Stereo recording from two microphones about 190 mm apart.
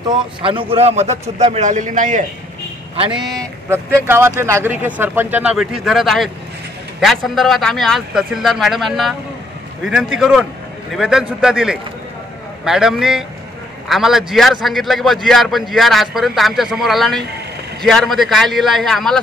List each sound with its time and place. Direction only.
0.0 s a man's voice: 25° right (ahead or behind); by 2.2 s 45° right (ahead or behind)
3.1 s a man's voice: centre (ahead or behind)
3.6 s a man's voice: 15° right (ahead or behind)